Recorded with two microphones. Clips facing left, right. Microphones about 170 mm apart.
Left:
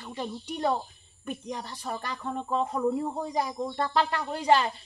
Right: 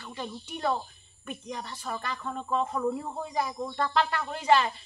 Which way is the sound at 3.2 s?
35° left (ahead or behind).